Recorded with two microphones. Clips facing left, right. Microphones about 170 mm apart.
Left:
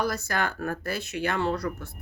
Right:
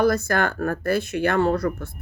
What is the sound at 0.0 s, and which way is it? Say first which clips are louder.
Speech: right 8 dB; 55° right (ahead or behind).